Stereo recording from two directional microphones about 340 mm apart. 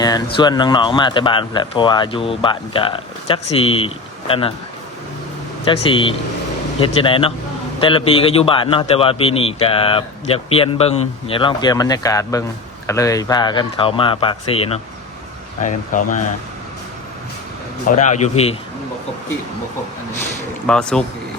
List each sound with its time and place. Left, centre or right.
0.3 s a man's voice: centre
5.6 s a man's voice: centre
17.8 s a man's voice: left
20.7 s speech: centre